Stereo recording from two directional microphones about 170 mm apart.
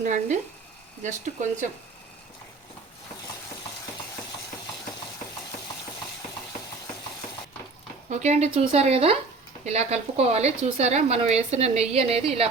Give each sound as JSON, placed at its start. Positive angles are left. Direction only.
{"t": 0.0, "sound": "speech", "side_deg": -45}
{"t": 8.1, "sound": "a woman's voice", "side_deg": -40}